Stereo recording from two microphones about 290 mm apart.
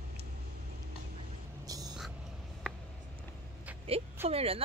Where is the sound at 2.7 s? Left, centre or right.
Centre.